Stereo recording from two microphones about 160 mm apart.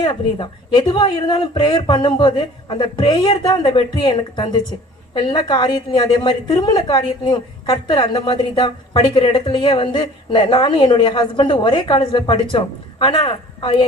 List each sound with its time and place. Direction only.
0.0 s a woman's voice: 30° left (ahead or behind)